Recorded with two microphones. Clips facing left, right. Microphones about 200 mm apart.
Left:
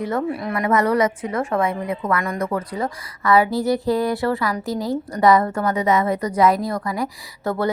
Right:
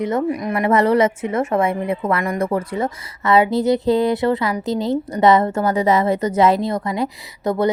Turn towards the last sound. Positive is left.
turn(degrees=-20)  # may be behind; listen again after turning